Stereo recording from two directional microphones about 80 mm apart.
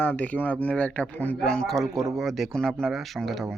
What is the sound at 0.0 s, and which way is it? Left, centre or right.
Speech, centre.